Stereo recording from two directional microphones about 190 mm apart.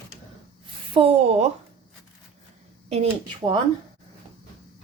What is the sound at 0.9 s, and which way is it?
Speech, 30° right (ahead or behind).